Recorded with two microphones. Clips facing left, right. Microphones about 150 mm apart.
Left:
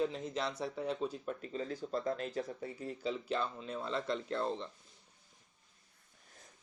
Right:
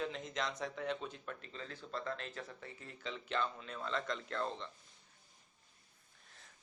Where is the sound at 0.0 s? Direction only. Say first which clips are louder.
Left 4 dB; 35° left (ahead or behind).